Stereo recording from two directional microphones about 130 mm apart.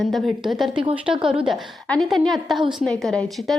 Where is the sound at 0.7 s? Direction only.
40° right (ahead or behind).